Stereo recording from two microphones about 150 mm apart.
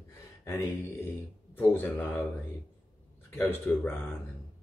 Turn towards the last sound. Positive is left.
turn(degrees=15)  # may be behind; listen again after turning